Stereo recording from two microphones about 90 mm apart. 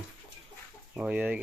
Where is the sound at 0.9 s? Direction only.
15° right (ahead or behind).